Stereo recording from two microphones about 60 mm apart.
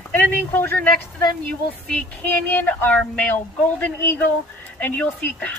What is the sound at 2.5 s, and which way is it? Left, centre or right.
Speech, left.